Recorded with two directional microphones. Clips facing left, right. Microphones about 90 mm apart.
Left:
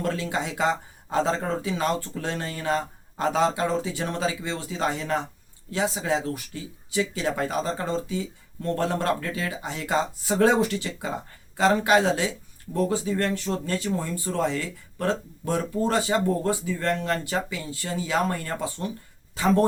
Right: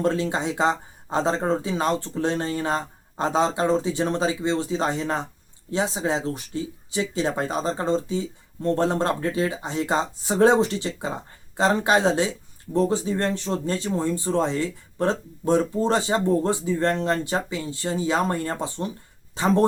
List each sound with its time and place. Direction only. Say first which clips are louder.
0.0 s speech: right 4 dB; 30° right (ahead or behind)